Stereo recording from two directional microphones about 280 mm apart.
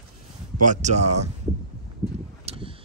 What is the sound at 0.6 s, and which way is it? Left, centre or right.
Speech, right.